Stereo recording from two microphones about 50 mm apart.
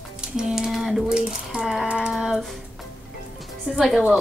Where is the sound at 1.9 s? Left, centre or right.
Centre.